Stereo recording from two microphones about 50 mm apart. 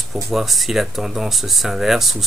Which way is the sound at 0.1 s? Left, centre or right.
Centre.